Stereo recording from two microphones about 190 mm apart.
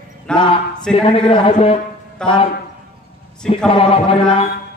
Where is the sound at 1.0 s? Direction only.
30° left (ahead or behind).